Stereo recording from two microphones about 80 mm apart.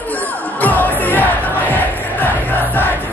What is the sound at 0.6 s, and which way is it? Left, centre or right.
Music, left.